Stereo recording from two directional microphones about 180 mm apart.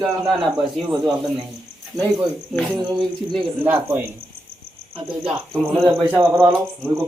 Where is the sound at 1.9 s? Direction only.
20° right (ahead or behind).